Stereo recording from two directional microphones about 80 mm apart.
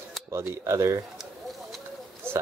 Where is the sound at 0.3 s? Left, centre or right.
Right.